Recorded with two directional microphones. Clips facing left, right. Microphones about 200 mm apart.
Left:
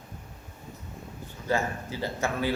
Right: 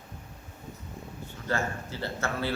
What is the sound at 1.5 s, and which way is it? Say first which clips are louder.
A man's voice: left 3 dB; 15° left (ahead or behind).